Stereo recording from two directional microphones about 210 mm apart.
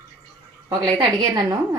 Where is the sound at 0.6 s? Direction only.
20° right (ahead or behind).